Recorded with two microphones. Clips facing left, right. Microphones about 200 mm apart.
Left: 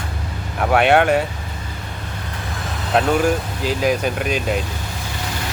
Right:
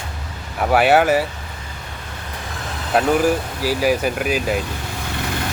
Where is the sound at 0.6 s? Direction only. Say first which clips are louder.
Even; 5° right (ahead or behind).